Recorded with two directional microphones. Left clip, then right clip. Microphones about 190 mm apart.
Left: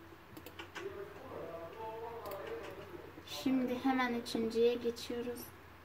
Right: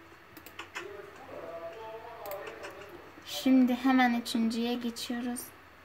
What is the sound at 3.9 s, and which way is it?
Speech, 55° right (ahead or behind).